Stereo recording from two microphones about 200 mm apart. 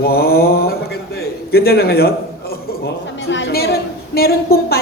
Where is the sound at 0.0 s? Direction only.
50° left (ahead or behind).